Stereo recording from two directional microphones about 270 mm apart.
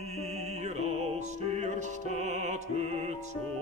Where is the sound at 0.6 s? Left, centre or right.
Right.